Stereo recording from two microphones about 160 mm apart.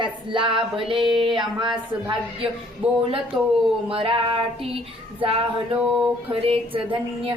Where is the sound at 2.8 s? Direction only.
5° right (ahead or behind).